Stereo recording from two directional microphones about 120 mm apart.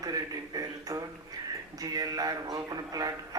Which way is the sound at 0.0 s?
30° right (ahead or behind).